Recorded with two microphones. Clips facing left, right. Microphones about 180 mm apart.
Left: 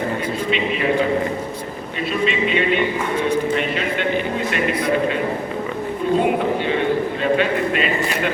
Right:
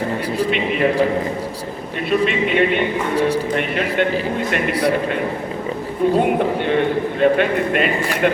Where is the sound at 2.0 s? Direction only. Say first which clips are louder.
Right 3 dB; 55° right (ahead or behind).